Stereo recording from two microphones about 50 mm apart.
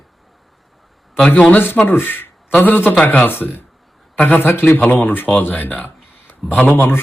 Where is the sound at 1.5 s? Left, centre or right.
Left.